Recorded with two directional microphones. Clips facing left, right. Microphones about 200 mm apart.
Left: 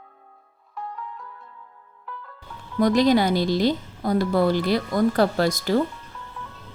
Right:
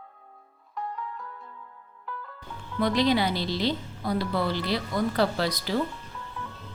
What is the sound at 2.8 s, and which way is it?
Speech, 45° left (ahead or behind).